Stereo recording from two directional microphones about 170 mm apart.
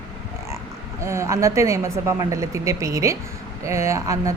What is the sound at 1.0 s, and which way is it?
A woman's voice, 15° right (ahead or behind).